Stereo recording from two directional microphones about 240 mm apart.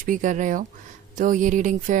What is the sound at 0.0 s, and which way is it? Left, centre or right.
A woman's voice, right.